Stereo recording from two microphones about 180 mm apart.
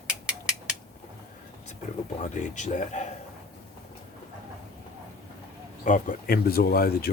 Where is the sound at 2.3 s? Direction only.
40° left (ahead or behind).